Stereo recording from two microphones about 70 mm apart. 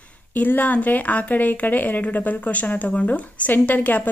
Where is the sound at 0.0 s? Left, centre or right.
Left.